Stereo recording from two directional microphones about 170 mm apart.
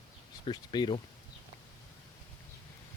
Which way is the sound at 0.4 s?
25° left (ahead or behind).